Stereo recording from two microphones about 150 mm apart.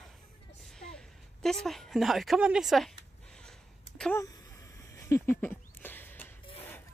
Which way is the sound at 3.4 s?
5° left (ahead or behind).